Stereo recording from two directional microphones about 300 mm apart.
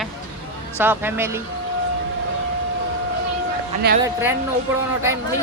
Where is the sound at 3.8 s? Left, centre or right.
Right.